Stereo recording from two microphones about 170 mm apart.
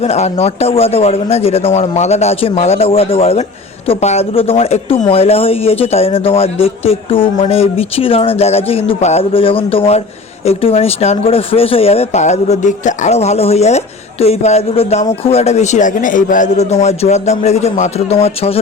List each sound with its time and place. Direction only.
0.0 s speech: 35° left (ahead or behind)